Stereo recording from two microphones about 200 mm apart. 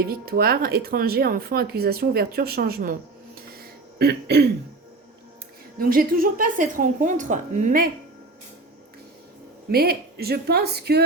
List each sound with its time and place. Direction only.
0.1 s speech: 50° right (ahead or behind)
3.6 s throat clearing: 55° right (ahead or behind)
5.8 s speech: 45° right (ahead or behind)
9.6 s speech: 50° right (ahead or behind)